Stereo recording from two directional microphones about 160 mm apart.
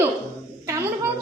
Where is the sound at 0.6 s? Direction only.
20° right (ahead or behind).